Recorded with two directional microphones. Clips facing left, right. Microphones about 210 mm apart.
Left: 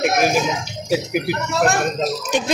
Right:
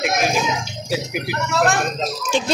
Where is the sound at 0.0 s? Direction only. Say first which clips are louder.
Left 3 dB; 45° left (ahead or behind).